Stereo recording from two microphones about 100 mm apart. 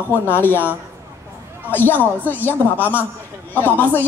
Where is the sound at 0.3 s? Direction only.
20° left (ahead or behind).